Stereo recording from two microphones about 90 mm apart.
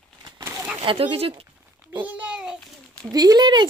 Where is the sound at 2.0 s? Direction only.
15° right (ahead or behind).